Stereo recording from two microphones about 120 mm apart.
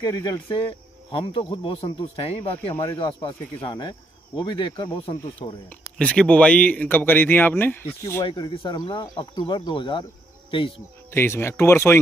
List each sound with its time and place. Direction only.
0.0 s speech: 35° left (ahead or behind); by 5.2 s 50° left (ahead or behind)
5.9 s speech: 10° left (ahead or behind); by 8.3 s 25° left (ahead or behind)
8.3 s speech: 45° left (ahead or behind)
11.1 s speech: 20° left (ahead or behind)